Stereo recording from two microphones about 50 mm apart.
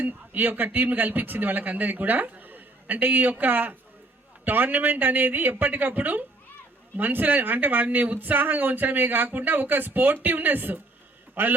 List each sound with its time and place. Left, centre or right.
0.0 s a man's voice: right